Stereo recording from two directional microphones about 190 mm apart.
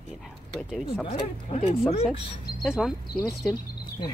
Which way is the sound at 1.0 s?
30° left (ahead or behind).